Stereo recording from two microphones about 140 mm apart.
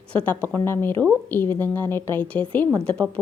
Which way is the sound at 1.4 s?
25° right (ahead or behind).